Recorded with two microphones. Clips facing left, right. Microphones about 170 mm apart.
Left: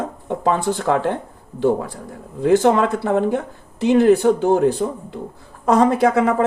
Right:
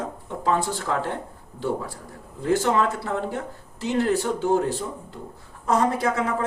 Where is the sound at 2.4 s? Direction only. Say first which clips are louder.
Left 7 dB; 65° left (ahead or behind).